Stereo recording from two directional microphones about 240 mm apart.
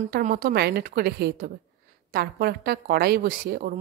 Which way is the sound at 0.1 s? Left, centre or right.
Right.